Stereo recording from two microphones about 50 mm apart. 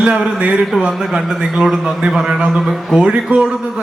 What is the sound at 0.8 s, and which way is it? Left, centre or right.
A man's voice, centre.